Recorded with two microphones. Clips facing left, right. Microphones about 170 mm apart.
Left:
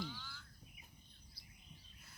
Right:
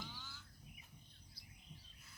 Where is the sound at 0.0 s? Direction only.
15° right (ahead or behind).